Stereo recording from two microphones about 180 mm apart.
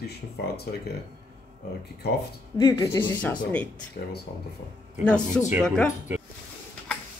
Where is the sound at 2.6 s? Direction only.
20° left (ahead or behind).